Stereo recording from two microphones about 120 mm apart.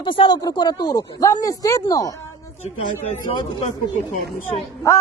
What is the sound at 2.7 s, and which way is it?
Speech, 55° left (ahead or behind).